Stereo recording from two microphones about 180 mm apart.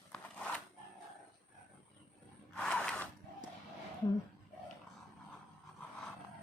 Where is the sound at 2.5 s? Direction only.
5° left (ahead or behind).